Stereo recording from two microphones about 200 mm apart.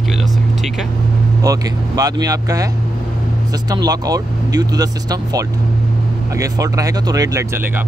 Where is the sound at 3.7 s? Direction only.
20° right (ahead or behind).